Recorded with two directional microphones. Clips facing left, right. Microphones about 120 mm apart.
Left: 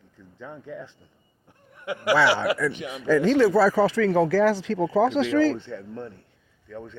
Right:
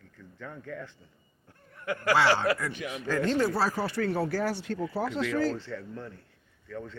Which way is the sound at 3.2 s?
90° left.